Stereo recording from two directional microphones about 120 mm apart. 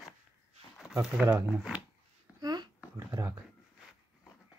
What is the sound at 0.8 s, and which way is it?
Speech, centre (ahead or behind).